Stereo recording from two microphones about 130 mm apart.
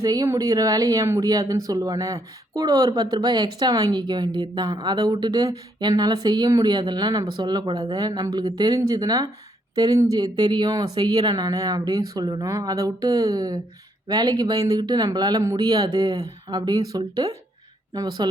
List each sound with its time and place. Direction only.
0.0 s speech: 25° right (ahead or behind)